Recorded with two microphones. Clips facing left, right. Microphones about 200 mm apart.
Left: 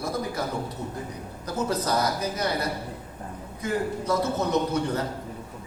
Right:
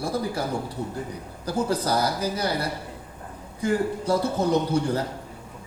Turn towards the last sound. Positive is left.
turn(degrees=-30)  # may be behind; listen again after turning